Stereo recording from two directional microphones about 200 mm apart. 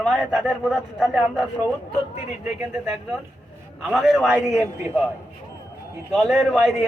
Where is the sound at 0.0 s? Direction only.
Centre (ahead or behind).